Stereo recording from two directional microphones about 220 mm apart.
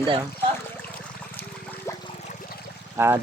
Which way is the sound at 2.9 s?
10° right (ahead or behind).